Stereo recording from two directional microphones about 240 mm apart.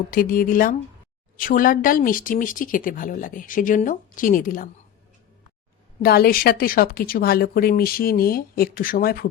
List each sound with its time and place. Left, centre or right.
0.1 s speech: left
6.0 s speech: left